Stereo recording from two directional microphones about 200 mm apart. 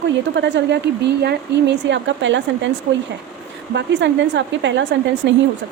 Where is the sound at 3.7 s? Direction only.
60° right (ahead or behind).